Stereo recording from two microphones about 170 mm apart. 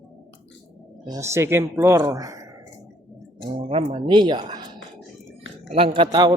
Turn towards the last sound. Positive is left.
turn(degrees=-25)  # may be behind; listen again after turning